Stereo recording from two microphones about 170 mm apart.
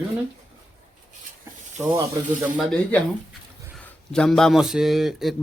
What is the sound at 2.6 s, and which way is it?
Speech, 5° left (ahead or behind).